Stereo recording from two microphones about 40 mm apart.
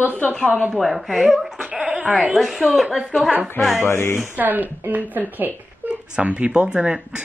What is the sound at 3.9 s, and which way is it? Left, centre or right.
Speech, left.